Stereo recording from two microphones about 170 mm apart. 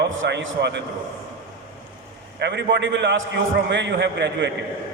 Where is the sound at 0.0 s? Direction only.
90° right.